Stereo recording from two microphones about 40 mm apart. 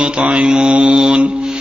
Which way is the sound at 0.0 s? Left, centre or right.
Right.